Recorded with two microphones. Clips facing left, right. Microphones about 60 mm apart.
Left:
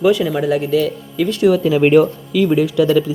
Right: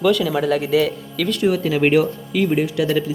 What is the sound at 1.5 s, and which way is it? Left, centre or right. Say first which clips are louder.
Speech: left 6 dB; left.